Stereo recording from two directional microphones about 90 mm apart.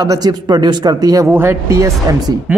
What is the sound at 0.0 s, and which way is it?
Speech, 45° right (ahead or behind).